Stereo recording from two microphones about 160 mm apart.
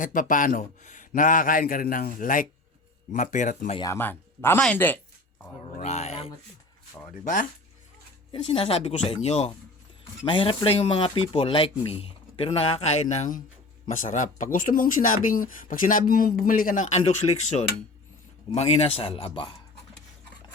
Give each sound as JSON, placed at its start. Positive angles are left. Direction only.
{"t": 0.0, "sound": "speech", "side_deg": 55}
{"t": 3.8, "sound": "speech", "side_deg": 15}
{"t": 5.7, "sound": "speech", "side_deg": 45}
{"t": 8.3, "sound": "speech", "side_deg": 35}
{"t": 18.5, "sound": "speech", "side_deg": 40}